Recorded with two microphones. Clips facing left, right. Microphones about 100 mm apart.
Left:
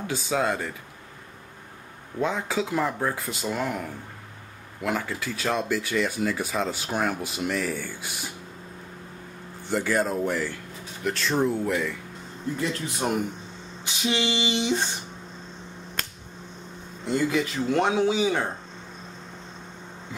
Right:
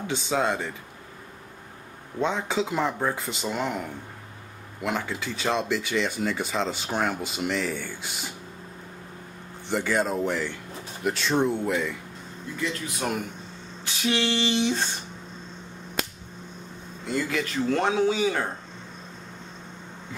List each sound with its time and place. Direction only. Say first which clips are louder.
0.0 s speech: even; centre (ahead or behind)
2.1 s speech: even; 5° left (ahead or behind)
9.7 s speech: even; centre (ahead or behind)
12.5 s speech: even; 35° left (ahead or behind)
13.8 s speech: right 1 dB; 20° left (ahead or behind)
17.3 s speech: left 1 dB; 15° left (ahead or behind)